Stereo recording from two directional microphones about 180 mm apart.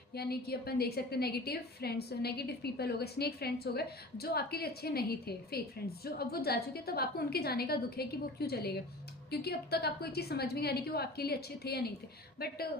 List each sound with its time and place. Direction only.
0.1 s a woman's voice: 60° left (ahead or behind)